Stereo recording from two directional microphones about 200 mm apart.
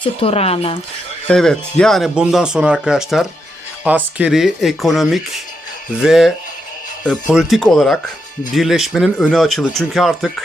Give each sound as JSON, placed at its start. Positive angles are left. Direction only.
{"t": 0.0, "sound": "speech", "side_deg": 30}
{"t": 1.3, "sound": "speech", "side_deg": 5}